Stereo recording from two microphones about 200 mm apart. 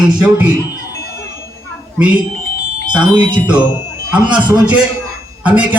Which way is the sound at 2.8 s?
20° right (ahead or behind).